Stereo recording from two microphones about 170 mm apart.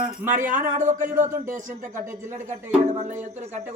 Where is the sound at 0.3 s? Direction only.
50° right (ahead or behind).